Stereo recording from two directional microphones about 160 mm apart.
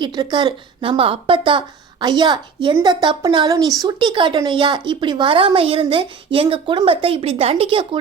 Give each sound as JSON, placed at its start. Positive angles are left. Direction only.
{"t": 0.0, "sound": "a woman's voice", "side_deg": -30}